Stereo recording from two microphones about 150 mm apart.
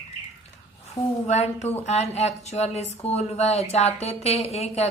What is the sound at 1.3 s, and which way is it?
Speech, 45° left (ahead or behind).